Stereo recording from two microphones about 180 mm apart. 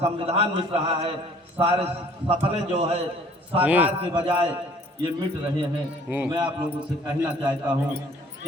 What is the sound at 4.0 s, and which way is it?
Speech, 30° right (ahead or behind).